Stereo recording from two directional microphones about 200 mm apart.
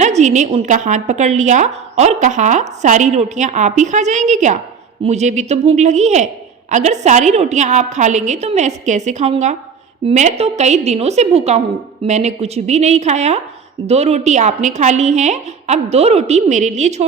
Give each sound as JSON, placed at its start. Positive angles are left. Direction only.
{"t": 0.0, "sound": "a woman's voice", "side_deg": -35}